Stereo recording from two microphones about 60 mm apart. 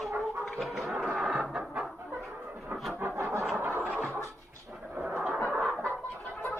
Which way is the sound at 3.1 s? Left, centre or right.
Right.